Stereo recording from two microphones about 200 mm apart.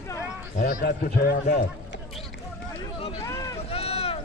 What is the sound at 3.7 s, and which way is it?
Run, 30° left (ahead or behind).